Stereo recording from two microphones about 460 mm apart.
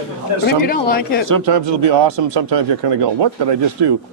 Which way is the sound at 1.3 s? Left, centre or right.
Right.